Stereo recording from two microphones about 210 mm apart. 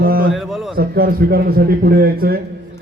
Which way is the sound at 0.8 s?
45° right (ahead or behind).